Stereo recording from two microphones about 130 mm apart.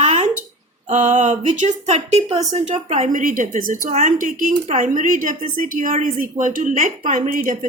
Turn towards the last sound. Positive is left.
turn(degrees=-80)